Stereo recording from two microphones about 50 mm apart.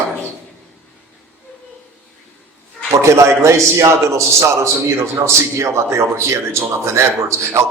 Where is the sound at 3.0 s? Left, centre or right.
Right.